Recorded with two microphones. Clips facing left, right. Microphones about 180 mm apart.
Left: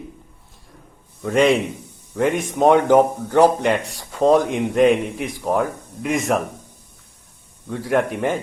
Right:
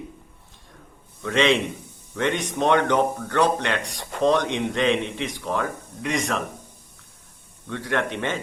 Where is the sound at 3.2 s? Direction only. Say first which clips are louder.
Left 7 dB; 75° right (ahead or behind).